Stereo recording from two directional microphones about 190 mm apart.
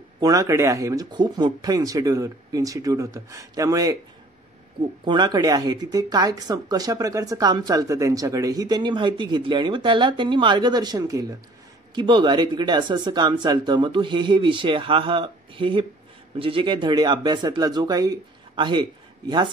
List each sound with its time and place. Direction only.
0.2 s speech: 20° right (ahead or behind)
5.0 s speech: 25° right (ahead or behind)